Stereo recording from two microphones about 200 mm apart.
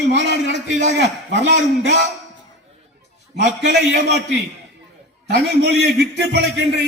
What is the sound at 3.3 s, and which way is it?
Speech, 60° right (ahead or behind).